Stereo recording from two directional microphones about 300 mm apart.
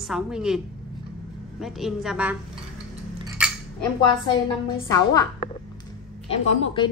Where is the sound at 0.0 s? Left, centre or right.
Centre.